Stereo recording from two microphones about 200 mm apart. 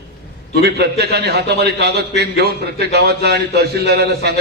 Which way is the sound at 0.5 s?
55° right (ahead or behind).